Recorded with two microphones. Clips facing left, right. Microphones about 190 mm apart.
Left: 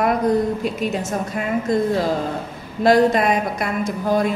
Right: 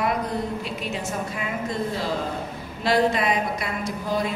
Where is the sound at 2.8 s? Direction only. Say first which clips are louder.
Left 6 dB; 45° left (ahead or behind).